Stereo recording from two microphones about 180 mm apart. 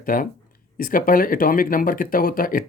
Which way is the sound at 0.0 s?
50° left (ahead or behind).